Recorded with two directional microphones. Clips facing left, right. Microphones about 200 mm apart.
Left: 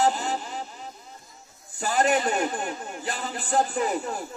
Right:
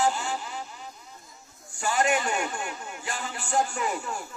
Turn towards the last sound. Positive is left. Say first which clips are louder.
# left 4 dB
turn(degrees=35)  # may be behind; listen again after turning